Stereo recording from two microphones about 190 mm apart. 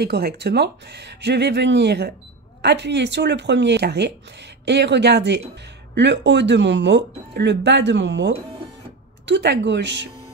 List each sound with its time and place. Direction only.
0.0 s speech: 55° right (ahead or behind)